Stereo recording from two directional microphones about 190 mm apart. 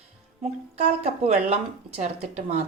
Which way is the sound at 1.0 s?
35° right (ahead or behind).